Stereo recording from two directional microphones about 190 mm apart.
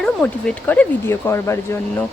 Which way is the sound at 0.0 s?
5° left (ahead or behind).